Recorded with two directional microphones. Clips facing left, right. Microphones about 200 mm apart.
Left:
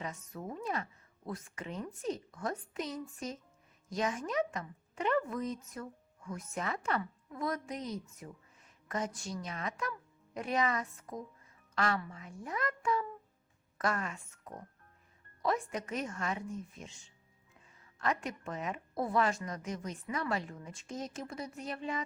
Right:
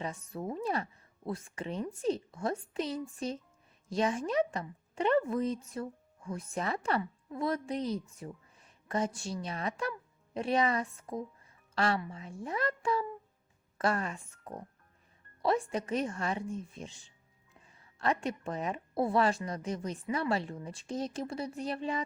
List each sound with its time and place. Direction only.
0.0 s a woman's voice: 30° right (ahead or behind)
18.0 s a woman's voice: 30° right (ahead or behind)